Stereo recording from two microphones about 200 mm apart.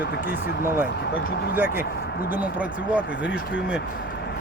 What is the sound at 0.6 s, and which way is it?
Speech, 10° right (ahead or behind).